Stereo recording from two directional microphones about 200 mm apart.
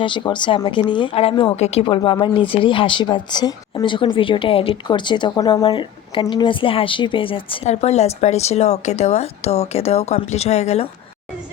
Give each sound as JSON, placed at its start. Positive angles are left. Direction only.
{"t": 0.0, "sound": "speech", "side_deg": 25}